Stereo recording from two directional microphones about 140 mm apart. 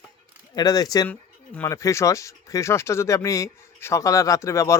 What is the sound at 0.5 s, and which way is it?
Speech, 25° left (ahead or behind).